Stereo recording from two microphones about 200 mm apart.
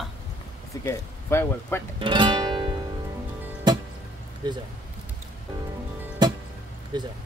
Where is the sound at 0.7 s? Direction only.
15° left (ahead or behind).